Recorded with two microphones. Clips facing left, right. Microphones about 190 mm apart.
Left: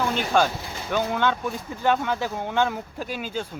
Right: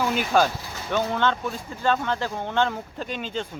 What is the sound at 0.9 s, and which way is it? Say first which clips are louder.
Speech: even; 5° left (ahead or behind).